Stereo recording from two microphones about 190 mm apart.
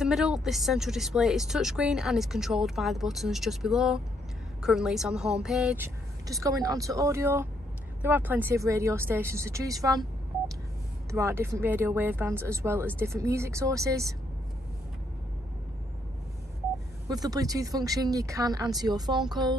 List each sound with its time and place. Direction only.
0.0 s speech: centre (ahead or behind)
6.2 s speech: 20° right (ahead or behind)
11.1 s speech: 15° right (ahead or behind)
17.1 s speech: 20° right (ahead or behind)